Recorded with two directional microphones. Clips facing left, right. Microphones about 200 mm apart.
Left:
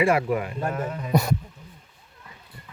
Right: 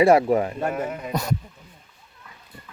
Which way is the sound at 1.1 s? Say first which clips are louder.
Left 6 dB; 10° left (ahead or behind).